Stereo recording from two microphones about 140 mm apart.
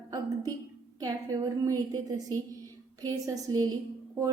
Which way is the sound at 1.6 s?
25° right (ahead or behind).